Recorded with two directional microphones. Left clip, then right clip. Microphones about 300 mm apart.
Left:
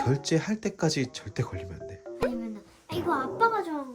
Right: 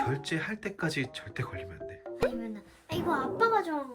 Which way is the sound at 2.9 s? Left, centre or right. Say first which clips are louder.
Left 2 dB; centre.